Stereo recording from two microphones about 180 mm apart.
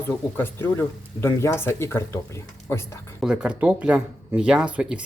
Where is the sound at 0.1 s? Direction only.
10° left (ahead or behind).